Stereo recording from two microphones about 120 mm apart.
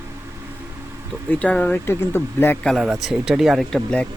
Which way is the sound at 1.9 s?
20° left (ahead or behind).